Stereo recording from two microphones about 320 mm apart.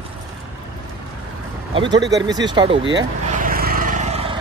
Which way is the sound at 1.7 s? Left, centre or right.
Centre.